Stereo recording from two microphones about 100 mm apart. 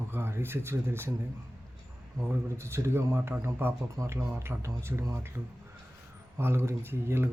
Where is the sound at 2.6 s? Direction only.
25° right (ahead or behind).